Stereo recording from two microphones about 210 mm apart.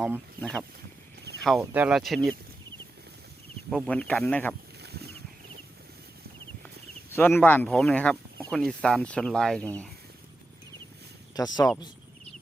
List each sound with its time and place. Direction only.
1.4 s speech: centre (ahead or behind)
3.7 s speech: 5° left (ahead or behind)
4.8 s a sound: 50° right (ahead or behind)
7.1 s speech: 10° left (ahead or behind)
11.3 s speech: 20° left (ahead or behind)